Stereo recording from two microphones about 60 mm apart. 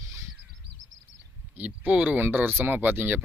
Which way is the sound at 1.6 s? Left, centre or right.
Right.